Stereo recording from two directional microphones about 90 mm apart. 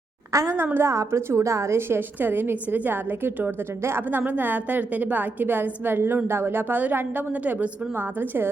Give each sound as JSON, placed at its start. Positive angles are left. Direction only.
{"t": 0.3, "sound": "a woman's voice", "side_deg": -25}